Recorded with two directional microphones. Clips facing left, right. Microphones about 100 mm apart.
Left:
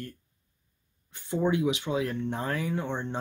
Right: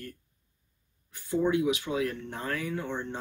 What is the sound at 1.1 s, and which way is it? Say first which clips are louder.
Speech: even; 25° left (ahead or behind).